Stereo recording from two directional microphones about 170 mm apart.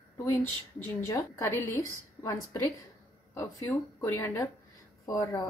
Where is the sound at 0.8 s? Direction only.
15° left (ahead or behind).